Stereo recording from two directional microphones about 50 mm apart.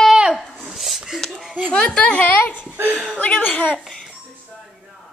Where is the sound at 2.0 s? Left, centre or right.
Left.